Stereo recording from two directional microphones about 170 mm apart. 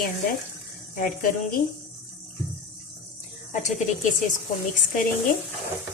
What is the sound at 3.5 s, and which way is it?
Speech, 45° left (ahead or behind).